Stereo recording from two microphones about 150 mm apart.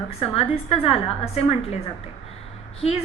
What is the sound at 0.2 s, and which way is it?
A woman's voice, 40° left (ahead or behind).